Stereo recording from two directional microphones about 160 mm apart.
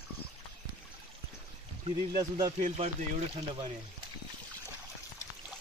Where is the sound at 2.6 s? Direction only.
45° right (ahead or behind).